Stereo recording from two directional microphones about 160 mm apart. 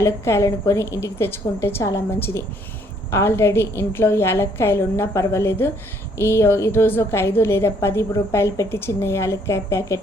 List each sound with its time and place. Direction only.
0.0 s a woman's voice: 15° left (ahead or behind)